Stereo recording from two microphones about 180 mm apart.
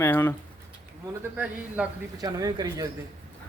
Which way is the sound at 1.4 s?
10° right (ahead or behind).